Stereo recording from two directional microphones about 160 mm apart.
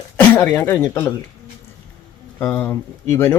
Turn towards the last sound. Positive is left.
turn(degrees=15)  # may be behind; listen again after turning